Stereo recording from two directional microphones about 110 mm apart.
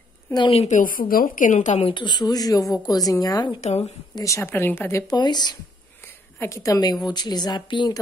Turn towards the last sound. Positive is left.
turn(degrees=45)  # may be behind; listen again after turning